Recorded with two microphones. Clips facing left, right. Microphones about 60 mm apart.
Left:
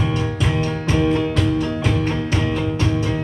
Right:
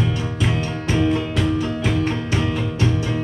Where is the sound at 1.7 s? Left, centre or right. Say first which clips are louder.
Left 1 dB; centre.